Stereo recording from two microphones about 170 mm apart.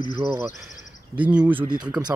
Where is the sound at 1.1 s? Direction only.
10° right (ahead or behind).